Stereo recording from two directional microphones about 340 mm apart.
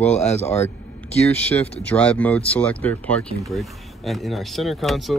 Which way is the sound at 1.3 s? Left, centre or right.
Centre.